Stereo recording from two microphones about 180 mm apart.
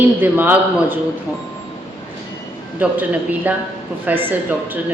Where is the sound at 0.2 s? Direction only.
10° right (ahead or behind).